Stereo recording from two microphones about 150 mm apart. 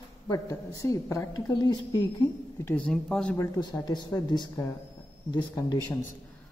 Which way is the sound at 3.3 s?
20° left (ahead or behind).